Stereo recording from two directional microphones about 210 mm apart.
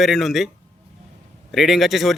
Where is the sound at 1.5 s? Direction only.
Centre (ahead or behind).